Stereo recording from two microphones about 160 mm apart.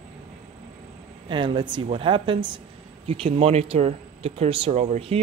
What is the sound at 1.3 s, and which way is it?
Speech, 30° right (ahead or behind).